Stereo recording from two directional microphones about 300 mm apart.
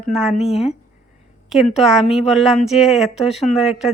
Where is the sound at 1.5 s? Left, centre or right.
Centre.